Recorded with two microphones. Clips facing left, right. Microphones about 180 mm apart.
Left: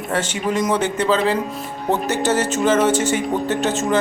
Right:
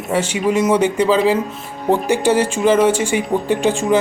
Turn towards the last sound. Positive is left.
turn(degrees=-10)  # may be behind; listen again after turning